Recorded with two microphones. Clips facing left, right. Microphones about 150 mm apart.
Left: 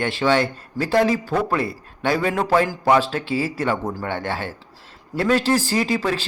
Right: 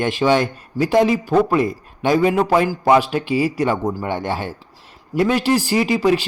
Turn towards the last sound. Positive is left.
turn(degrees=-15)  # may be behind; listen again after turning